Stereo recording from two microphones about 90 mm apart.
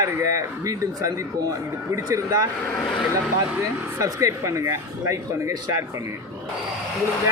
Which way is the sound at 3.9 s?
35° right (ahead or behind).